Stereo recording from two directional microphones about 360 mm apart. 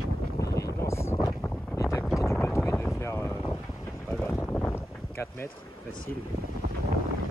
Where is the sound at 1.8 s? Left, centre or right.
Centre.